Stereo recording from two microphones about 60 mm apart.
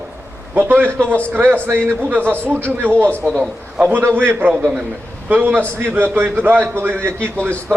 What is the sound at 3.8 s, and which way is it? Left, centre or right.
A man's voice, right.